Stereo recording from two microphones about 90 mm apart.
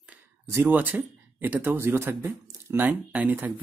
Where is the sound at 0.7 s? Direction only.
20° right (ahead or behind).